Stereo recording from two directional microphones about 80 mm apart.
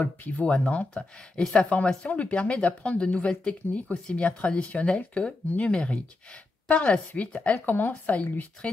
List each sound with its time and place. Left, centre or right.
0.0 s speech: centre